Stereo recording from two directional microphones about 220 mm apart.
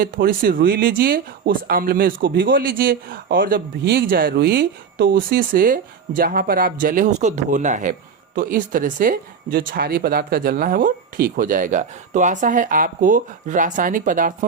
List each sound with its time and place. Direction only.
0.0 s speech: 40° right (ahead or behind)